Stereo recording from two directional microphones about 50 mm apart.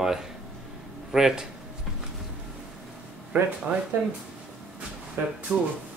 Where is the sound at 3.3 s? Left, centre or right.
Right.